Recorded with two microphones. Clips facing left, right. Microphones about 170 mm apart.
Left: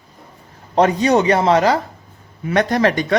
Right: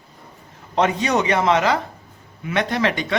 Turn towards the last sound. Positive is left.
turn(degrees=45)  # may be behind; listen again after turning